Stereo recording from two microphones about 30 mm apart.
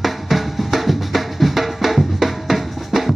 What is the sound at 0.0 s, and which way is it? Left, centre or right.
Drum, centre.